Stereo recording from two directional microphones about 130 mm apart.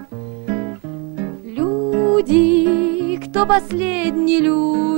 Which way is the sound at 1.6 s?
5° right (ahead or behind).